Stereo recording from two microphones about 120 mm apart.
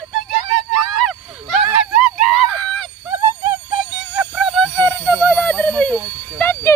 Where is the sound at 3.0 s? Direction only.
20° right (ahead or behind).